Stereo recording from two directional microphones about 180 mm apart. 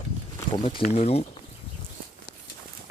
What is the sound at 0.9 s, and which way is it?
Speech, 35° left (ahead or behind).